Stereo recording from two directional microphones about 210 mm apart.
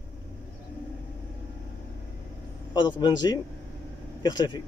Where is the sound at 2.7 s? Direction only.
20° left (ahead or behind).